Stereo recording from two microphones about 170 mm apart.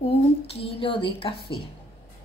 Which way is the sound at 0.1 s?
35° left (ahead or behind).